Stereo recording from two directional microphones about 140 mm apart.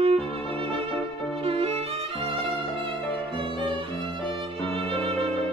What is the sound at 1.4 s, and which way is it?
Violin, 45° right (ahead or behind).